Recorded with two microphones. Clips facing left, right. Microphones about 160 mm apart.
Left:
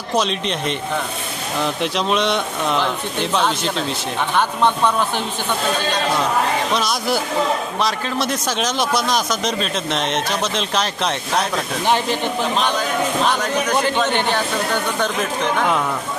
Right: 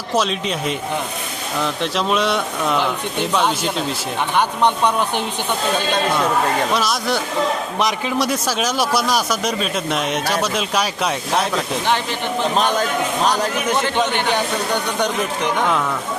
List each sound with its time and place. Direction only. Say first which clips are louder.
0.2 s speech: even; 5° right (ahead or behind)
6.7 s speech: even; centre (ahead or behind)
7.8 s speech: right 2 dB; 15° right (ahead or behind)
11.5 s speech: left 1 dB; 15° left (ahead or behind)
12.5 s a man's voice: right 4 dB; 45° right (ahead or behind)
13.2 s speech: right 1 dB; 35° right (ahead or behind)